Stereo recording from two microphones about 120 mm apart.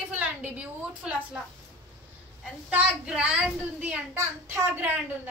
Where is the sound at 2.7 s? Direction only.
10° right (ahead or behind).